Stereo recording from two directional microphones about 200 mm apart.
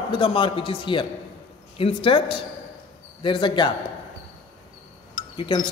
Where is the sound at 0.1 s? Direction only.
25° left (ahead or behind).